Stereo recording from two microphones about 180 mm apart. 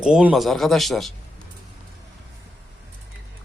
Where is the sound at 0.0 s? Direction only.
5° right (ahead or behind).